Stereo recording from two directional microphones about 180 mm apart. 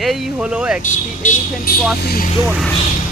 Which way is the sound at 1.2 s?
45° left (ahead or behind).